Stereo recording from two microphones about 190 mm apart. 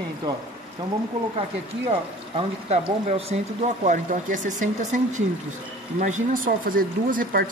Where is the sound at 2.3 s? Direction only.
35° right (ahead or behind).